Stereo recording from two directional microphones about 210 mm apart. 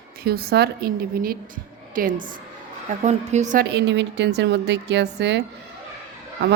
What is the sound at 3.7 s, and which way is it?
Speech, 55° right (ahead or behind).